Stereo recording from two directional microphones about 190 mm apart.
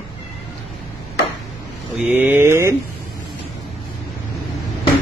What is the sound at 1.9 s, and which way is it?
Speech, 5° right (ahead or behind).